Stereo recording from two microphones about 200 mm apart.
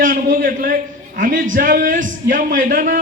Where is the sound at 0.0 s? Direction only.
45° right (ahead or behind).